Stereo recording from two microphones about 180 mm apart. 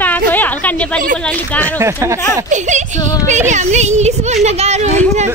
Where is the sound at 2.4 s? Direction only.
40° right (ahead or behind).